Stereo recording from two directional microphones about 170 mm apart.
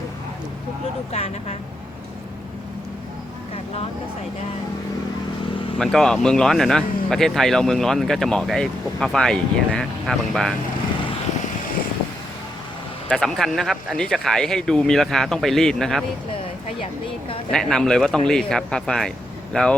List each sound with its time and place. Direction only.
1.1 s speech: 35° left (ahead or behind)
5.8 s speech: 5° left (ahead or behind)
13.1 s speech: 5° left (ahead or behind)
17.5 s speech: 5° left (ahead or behind)